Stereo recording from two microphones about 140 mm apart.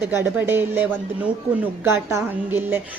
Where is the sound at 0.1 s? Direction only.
15° right (ahead or behind).